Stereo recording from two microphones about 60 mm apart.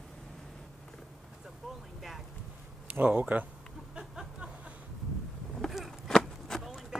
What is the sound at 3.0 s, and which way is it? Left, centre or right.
Speech, centre.